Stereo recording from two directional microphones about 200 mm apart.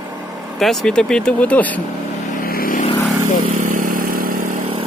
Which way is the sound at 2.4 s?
45° left (ahead or behind).